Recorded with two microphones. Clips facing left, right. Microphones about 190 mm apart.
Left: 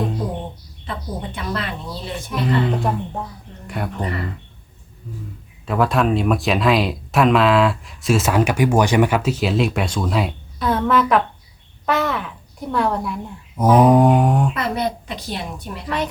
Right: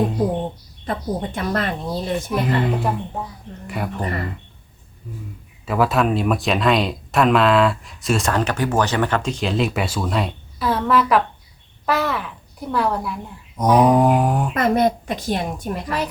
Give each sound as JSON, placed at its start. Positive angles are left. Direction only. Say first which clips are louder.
{"t": 0.9, "sound": "speech", "louder": "right 5 dB", "side_deg": -45}
{"t": 2.6, "sound": "speech", "louder": "even", "side_deg": -5}
{"t": 5.6, "sound": "speech", "louder": "even", "side_deg": 0}
{"t": 14.5, "sound": "speech", "louder": "right 5 dB", "side_deg": -45}